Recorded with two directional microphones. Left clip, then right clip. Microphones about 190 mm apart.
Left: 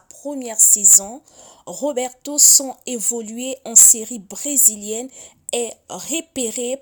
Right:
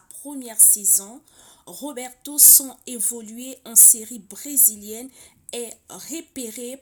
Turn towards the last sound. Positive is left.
turn(degrees=35)  # may be behind; listen again after turning